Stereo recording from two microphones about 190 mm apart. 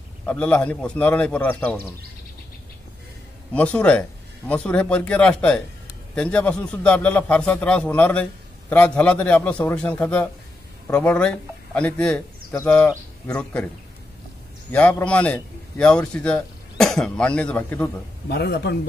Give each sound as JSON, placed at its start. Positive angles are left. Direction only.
{"t": 0.3, "sound": "a man's voice", "side_deg": 5}
{"t": 3.5, "sound": "a man's voice", "side_deg": 5}
{"t": 14.7, "sound": "a man's voice", "side_deg": 5}
{"t": 18.3, "sound": "speech", "side_deg": 60}